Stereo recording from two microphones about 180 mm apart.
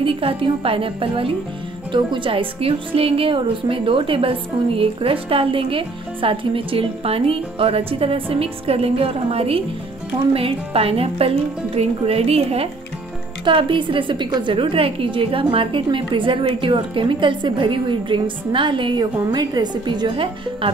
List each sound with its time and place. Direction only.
0.0 s a woman's voice: 30° right (ahead or behind)